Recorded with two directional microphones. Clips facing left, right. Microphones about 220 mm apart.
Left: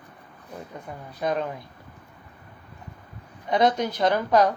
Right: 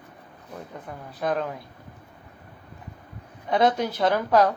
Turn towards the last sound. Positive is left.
turn(degrees=-5)  # may be behind; listen again after turning